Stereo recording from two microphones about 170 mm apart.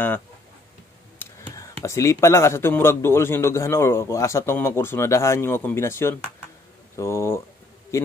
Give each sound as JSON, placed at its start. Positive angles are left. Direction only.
{"t": 1.2, "sound": "speech", "side_deg": 15}